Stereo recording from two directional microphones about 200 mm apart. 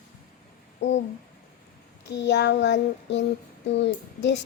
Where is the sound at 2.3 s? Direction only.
60° left (ahead or behind).